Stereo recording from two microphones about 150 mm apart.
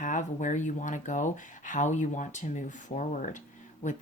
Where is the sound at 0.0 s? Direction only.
55° left (ahead or behind).